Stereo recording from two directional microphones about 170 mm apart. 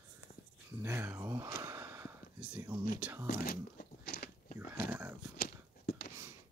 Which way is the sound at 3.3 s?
60° left (ahead or behind).